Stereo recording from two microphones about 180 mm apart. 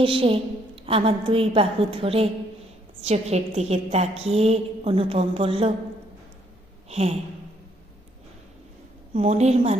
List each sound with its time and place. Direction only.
0.0 s a woman's voice: 30° right (ahead or behind)
6.8 s a sound: 35° right (ahead or behind)
9.1 s a woman's voice: 35° right (ahead or behind)